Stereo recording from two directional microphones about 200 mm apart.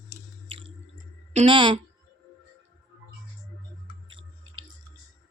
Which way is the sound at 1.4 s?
25° right (ahead or behind).